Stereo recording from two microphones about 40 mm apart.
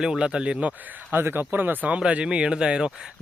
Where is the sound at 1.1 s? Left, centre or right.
Right.